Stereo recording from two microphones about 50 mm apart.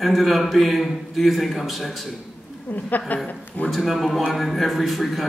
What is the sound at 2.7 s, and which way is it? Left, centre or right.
Speech, left.